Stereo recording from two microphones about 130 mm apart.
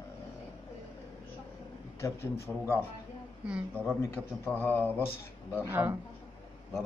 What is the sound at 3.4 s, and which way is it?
Speech, 10° right (ahead or behind).